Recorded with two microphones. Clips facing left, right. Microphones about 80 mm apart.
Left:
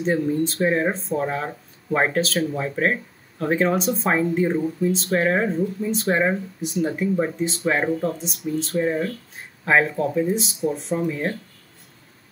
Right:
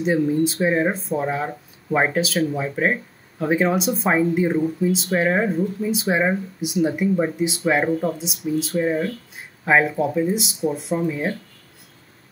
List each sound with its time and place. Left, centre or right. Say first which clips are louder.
0.0 s speech: right 2 dB; centre